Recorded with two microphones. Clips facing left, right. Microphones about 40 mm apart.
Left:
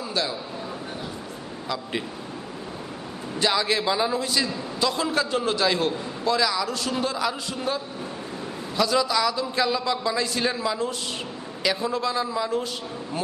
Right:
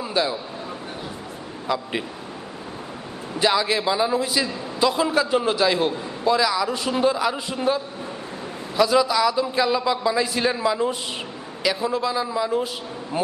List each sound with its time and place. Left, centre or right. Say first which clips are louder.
0.1 s speech: right 5 dB; centre
1.7 s a man's voice: right 4 dB; centre
3.3 s a man's voice: right 3 dB; centre
6.7 s a man's voice: right 5 dB; centre
11.6 s a man's voice: right 2 dB; centre